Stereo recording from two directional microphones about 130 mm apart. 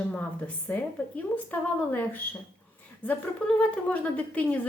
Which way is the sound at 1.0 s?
10° left (ahead or behind).